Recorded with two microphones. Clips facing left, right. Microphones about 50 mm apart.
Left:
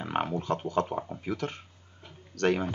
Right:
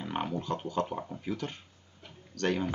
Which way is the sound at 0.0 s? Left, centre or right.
Left.